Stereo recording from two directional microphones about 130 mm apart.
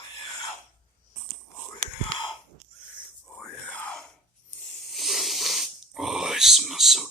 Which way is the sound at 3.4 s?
10° left (ahead or behind).